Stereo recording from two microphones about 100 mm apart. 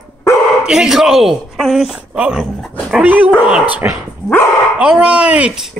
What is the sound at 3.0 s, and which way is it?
Speech, 15° right (ahead or behind).